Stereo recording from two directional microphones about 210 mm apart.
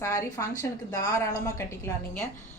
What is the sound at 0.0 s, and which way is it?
A woman's voice, 15° left (ahead or behind).